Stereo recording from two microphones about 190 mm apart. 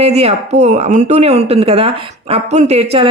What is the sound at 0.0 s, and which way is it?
A woman's voice, 35° right (ahead or behind).